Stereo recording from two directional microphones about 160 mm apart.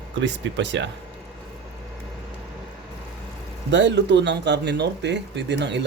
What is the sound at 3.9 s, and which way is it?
A man's voice, 90° right.